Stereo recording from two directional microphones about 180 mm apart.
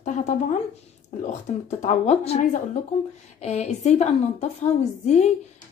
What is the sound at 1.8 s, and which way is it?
A woman's voice, 40° left (ahead or behind).